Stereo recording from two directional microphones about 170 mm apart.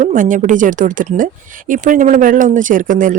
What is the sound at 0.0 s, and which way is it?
Speech, 50° right (ahead or behind).